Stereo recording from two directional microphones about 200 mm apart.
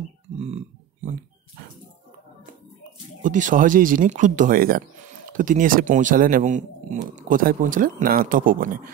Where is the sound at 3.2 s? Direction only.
40° right (ahead or behind).